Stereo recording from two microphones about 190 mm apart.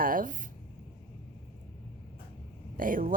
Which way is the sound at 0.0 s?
45° right (ahead or behind).